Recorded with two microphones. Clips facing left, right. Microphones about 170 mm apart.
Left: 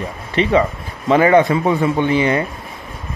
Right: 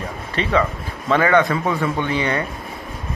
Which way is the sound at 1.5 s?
20° left (ahead or behind).